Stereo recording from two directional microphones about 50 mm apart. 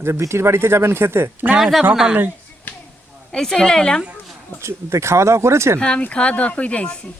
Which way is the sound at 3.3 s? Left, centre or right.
Centre.